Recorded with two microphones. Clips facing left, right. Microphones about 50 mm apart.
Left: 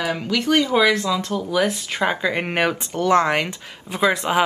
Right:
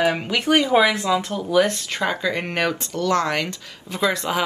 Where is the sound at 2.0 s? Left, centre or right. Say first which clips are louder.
Left 2 dB; left.